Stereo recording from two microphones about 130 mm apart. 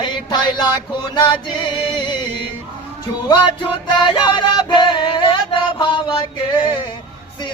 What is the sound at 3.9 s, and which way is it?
Music, 40° left (ahead or behind).